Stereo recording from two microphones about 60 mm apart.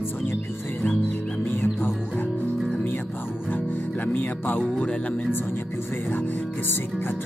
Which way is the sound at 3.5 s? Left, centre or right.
Left.